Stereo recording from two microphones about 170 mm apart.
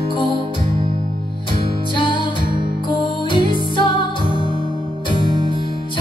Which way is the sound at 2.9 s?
30° left (ahead or behind).